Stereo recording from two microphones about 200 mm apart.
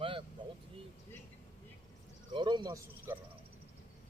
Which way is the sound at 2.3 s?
20° right (ahead or behind).